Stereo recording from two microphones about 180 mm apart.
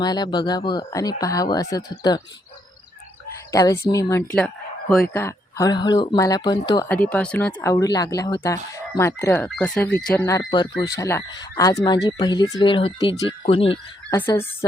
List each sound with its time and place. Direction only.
0.0 s speech: 25° left (ahead or behind)
3.5 s speech: 15° left (ahead or behind)
4.4 s speech: 5° left (ahead or behind)
5.1 s speech: 15° left (ahead or behind)
6.8 s speech: 5° left (ahead or behind)
10.3 s speech: 25° left (ahead or behind)